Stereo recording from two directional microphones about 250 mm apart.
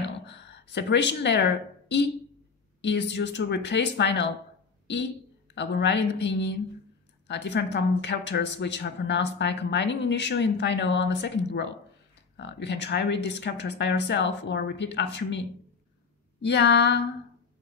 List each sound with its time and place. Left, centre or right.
0.0 s a sound: left
2.8 s speech: left
5.5 s speech: left